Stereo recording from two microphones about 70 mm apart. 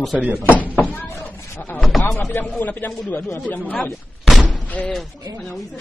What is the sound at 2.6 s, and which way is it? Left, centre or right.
A man's voice, left.